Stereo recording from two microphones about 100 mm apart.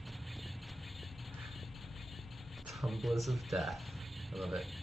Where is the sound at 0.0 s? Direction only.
Centre (ahead or behind).